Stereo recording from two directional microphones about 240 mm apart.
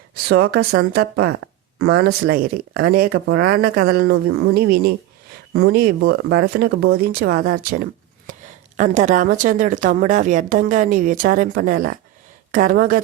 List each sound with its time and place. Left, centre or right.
0.3 s speech: right